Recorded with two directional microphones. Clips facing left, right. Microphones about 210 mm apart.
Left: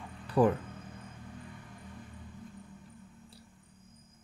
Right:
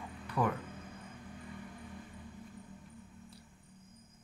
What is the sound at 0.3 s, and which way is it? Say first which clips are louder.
Speech: left 8 dB; 30° left (ahead or behind).